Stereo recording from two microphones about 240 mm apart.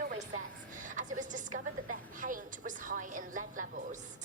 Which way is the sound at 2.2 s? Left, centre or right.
Right.